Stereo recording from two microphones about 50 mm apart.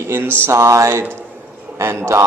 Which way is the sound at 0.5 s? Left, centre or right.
Right.